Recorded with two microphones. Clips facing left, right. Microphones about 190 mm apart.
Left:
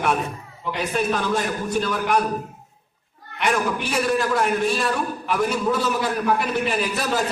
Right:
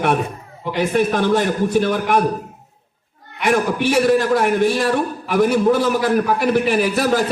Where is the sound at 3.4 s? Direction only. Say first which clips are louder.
Right 5 dB; 60° right (ahead or behind).